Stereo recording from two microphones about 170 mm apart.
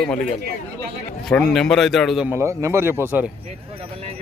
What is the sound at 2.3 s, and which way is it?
Speech, 15° right (ahead or behind).